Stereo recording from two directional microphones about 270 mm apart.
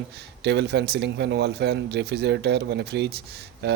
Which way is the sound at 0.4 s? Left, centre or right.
Right.